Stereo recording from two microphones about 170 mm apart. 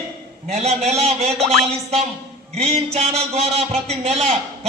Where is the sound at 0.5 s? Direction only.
40° right (ahead or behind).